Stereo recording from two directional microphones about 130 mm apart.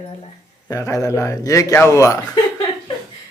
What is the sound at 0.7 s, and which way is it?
Speech, 25° left (ahead or behind).